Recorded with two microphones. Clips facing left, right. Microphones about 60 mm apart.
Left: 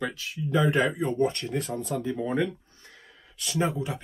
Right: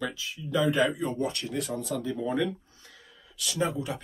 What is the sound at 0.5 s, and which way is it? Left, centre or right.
Speech, left.